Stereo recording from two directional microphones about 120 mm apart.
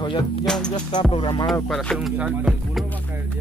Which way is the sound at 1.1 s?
40° left (ahead or behind).